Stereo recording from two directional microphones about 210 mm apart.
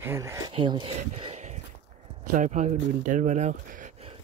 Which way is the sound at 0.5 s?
25° right (ahead or behind).